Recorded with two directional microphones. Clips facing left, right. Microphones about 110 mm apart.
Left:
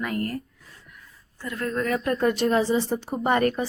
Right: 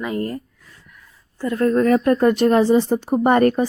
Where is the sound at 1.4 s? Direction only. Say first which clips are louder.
Right 10 dB; 35° right (ahead or behind).